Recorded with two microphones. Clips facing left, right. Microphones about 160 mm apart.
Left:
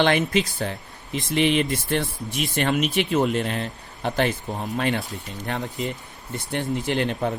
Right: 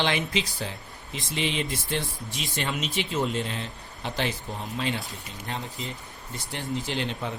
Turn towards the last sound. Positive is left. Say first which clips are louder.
# left 7 dB
turn(degrees=55)  # may be behind; listen again after turning